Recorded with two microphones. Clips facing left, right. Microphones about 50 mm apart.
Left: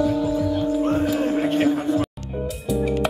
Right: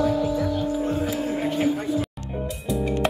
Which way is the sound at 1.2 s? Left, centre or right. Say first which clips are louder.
Left 4 dB; left.